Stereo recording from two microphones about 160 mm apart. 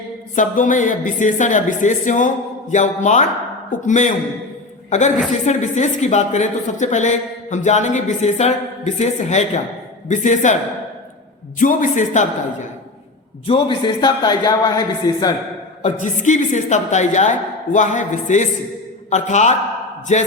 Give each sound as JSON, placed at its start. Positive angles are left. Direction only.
{"t": 0.3, "sound": "a woman's voice", "side_deg": 55}
{"t": 11.6, "sound": "a woman's voice", "side_deg": 50}
{"t": 13.5, "sound": "speech", "side_deg": 30}
{"t": 15.8, "sound": "a woman's voice", "side_deg": 50}